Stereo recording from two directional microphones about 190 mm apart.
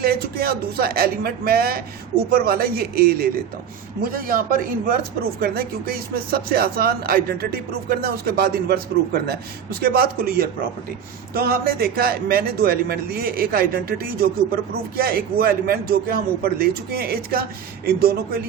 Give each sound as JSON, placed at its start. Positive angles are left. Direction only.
{"t": 0.0, "sound": "speech", "side_deg": -55}